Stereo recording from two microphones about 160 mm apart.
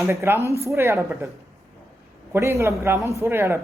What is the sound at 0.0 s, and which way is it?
Speech, 15° right (ahead or behind).